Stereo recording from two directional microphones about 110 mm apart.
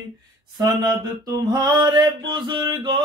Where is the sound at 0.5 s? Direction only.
35° right (ahead or behind).